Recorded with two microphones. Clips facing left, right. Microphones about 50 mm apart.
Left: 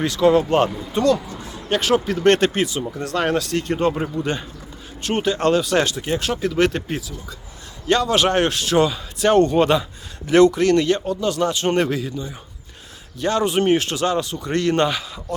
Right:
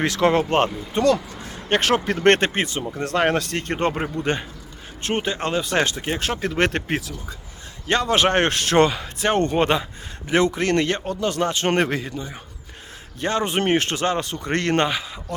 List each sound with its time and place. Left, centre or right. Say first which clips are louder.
0.0 s speech: left 3 dB; right
2.1 s a man's voice: left 1 dB; right
5.0 s speech: left 5 dB; right
5.6 s a man's voice: left 2 dB; right
7.9 s a man's voice: left 1 dB; right
9.2 s a man's voice: left 4 dB; right
14.8 s speech: left 2 dB; right